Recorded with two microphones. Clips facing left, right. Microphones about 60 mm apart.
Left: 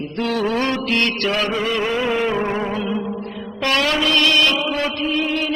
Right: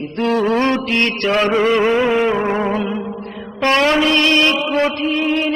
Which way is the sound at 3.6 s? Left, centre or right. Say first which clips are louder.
Right 5 dB; right.